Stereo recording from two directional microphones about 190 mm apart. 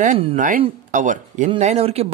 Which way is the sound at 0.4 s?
40° right (ahead or behind).